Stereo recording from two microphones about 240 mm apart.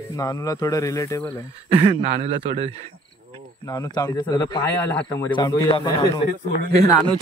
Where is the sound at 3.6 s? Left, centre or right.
Centre.